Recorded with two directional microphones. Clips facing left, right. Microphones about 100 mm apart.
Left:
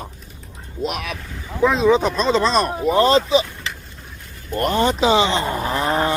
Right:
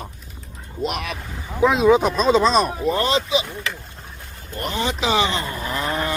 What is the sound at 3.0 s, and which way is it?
Speech, 35° left (ahead or behind).